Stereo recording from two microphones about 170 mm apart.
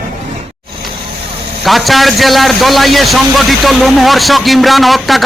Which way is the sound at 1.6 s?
Centre (ahead or behind).